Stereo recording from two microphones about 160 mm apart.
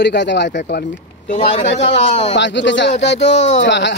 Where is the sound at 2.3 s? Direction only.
90° left.